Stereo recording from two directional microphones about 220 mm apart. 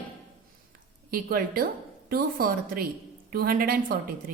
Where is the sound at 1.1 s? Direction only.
40° right (ahead or behind).